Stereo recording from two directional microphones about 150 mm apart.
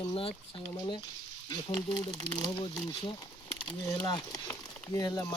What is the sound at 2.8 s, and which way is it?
Speech, 30° left (ahead or behind).